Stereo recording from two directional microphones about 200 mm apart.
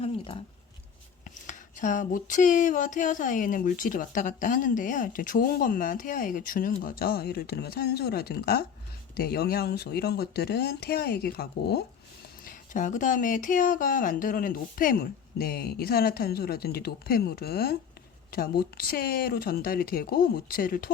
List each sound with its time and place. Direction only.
0.0 s a sound: 25° left (ahead or behind)
1.5 s speech: 40° left (ahead or behind)
12.5 s speech: 40° left (ahead or behind)